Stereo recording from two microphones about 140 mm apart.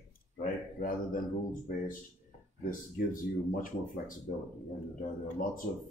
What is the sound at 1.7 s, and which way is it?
Speech, 70° left (ahead or behind).